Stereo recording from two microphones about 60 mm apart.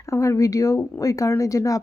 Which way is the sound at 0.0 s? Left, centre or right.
Left.